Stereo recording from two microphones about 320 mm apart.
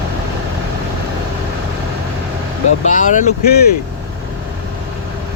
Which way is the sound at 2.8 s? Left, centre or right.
Left.